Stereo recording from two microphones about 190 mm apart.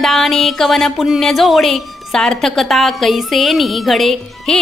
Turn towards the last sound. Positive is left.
turn(degrees=0)  # may be behind; listen again after turning